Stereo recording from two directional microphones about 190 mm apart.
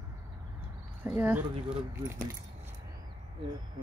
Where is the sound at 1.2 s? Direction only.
10° right (ahead or behind).